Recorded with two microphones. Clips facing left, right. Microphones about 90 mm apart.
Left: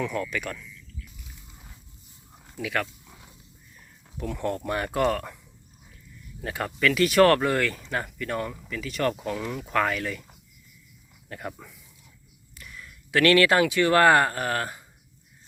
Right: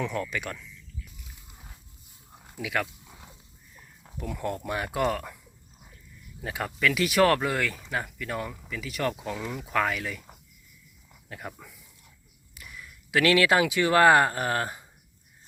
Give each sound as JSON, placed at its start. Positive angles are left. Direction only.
{"t": 0.0, "sound": "speech", "side_deg": -25}
{"t": 2.4, "sound": "dog", "side_deg": -10}
{"t": 4.2, "sound": "speech", "side_deg": -10}
{"t": 6.4, "sound": "speech", "side_deg": -10}
{"t": 11.3, "sound": "speech", "side_deg": 0}